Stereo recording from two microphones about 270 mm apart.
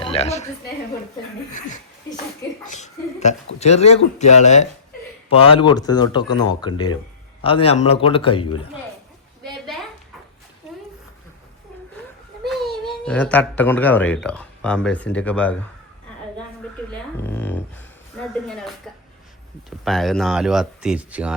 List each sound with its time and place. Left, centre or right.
0.0 s speech: left
2.6 s speech: left
12.5 s speech: centre
17.2 s speech: centre
19.8 s speech: centre